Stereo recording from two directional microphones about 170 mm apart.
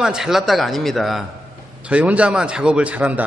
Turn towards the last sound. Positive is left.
turn(degrees=-10)  # may be behind; listen again after turning